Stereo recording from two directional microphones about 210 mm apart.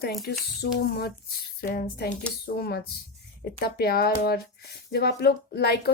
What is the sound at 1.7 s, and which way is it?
Speech, 55° left (ahead or behind).